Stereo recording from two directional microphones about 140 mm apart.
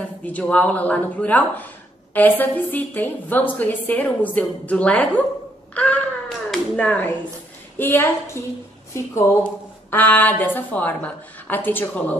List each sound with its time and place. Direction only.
0.3 s a woman's voice: 10° left (ahead or behind)
9.4 s a woman's voice: 15° left (ahead or behind)